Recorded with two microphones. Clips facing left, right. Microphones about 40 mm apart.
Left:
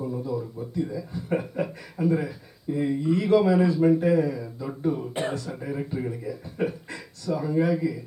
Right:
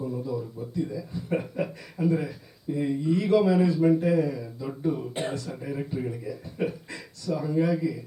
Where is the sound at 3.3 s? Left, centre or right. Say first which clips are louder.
Left 2 dB; centre.